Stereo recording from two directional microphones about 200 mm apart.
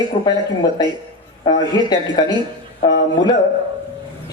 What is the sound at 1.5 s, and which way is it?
Speech, 20° left (ahead or behind).